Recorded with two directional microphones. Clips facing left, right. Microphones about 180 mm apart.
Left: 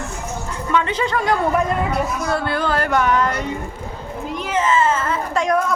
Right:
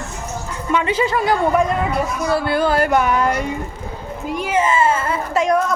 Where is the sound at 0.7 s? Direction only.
10° right (ahead or behind).